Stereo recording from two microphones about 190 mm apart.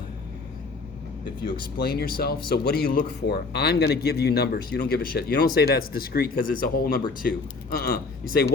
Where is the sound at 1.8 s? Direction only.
55° left (ahead or behind).